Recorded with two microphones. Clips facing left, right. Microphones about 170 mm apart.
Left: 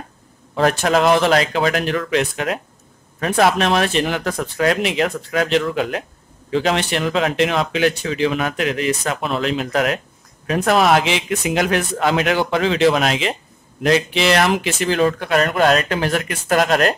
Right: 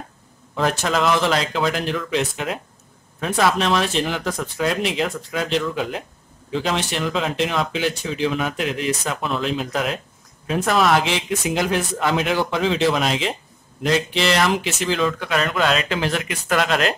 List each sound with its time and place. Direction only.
0.6 s speech: 60° left (ahead or behind)